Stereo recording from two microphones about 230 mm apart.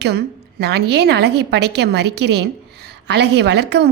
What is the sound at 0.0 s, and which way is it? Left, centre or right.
A woman's voice, right.